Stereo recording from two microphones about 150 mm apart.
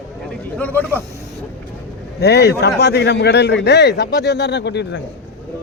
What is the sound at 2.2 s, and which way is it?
Speech, 90° left.